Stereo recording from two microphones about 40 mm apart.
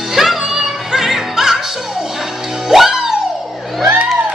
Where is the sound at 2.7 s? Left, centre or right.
Centre.